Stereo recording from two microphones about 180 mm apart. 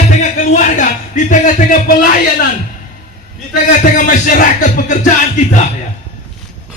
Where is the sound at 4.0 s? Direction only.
45° left (ahead or behind).